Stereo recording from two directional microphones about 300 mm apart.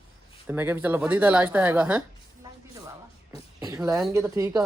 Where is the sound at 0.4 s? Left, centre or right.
Centre.